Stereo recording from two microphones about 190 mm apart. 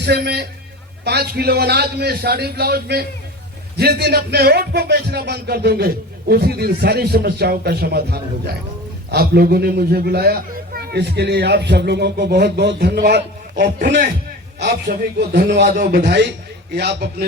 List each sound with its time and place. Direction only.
0.0 s a man's voice: 60° right (ahead or behind)
14.9 s a man's voice: 45° right (ahead or behind)
15.2 s a man's voice: 60° right (ahead or behind)
15.6 s a man's voice: 50° right (ahead or behind)
16.0 s a man's voice: 60° right (ahead or behind)